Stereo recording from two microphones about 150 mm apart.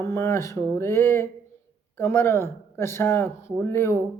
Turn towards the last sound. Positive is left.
turn(degrees=15)  # may be behind; listen again after turning